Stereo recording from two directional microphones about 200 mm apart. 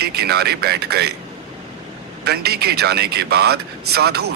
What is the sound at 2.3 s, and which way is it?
Speech, 55° right (ahead or behind).